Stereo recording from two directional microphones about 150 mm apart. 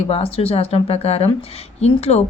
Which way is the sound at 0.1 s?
40° left (ahead or behind).